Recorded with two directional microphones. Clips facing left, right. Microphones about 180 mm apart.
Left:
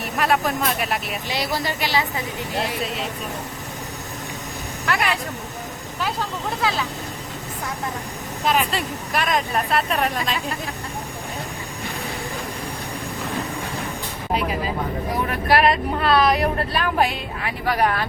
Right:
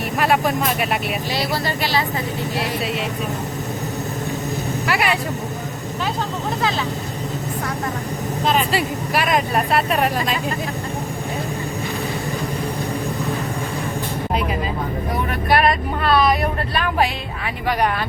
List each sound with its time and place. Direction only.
0.2 s speech: centre (ahead or behind)
1.3 s speech: 15° left (ahead or behind)
4.9 s speech: 10° right (ahead or behind)
8.7 s speech: 5° right (ahead or behind)
15.3 s speech: centre (ahead or behind)